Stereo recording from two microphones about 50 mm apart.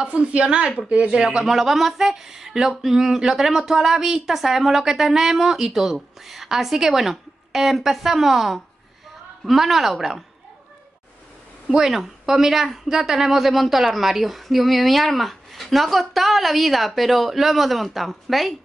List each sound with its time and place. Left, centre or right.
0.0 s a woman's voice: right
1.1 s a woman's voice: centre
11.7 s a woman's voice: centre